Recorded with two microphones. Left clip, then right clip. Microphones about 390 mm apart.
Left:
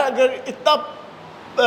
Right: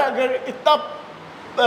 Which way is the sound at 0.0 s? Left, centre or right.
Centre.